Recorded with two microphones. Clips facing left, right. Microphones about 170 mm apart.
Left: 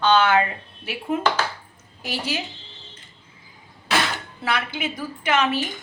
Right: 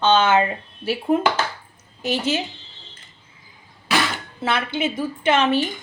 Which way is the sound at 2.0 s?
25° right (ahead or behind).